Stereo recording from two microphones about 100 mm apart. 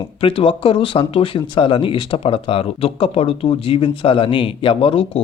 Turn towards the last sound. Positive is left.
turn(degrees=65)  # may be behind; listen again after turning